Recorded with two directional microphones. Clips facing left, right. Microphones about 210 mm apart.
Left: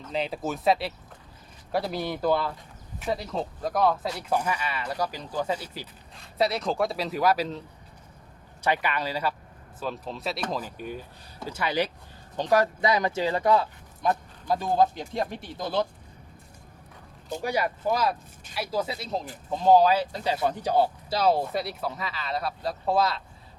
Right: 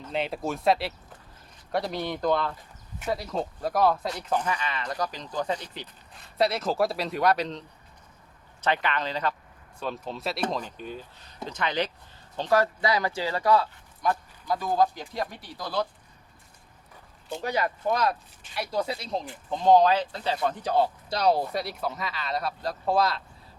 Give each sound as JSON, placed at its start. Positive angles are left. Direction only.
{"t": 0.0, "sound": "speech", "side_deg": 0}
{"t": 8.6, "sound": "speech", "side_deg": 10}
{"t": 17.4, "sound": "speech", "side_deg": 10}